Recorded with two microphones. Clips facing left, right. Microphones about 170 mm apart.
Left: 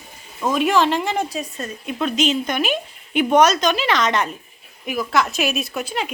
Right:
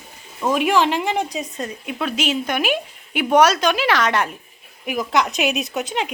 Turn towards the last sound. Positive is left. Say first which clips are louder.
# right 1 dB
turn(degrees=-20)  # may be behind; listen again after turning